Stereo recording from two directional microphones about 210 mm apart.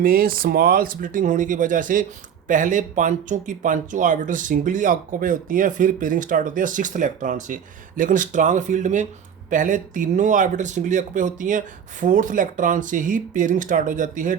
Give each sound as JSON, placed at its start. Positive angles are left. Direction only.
{"t": 0.0, "sound": "speech", "side_deg": -45}